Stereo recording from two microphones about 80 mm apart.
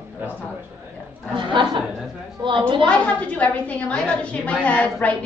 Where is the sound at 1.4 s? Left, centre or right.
Right.